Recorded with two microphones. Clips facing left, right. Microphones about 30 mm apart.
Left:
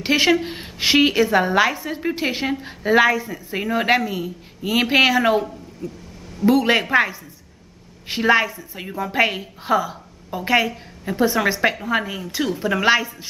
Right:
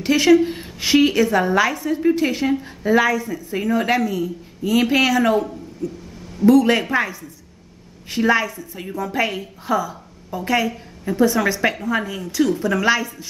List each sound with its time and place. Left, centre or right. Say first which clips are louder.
0.0 s a woman's voice: right 3 dB; left